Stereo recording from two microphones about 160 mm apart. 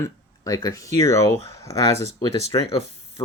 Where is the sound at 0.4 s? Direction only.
20° left (ahead or behind).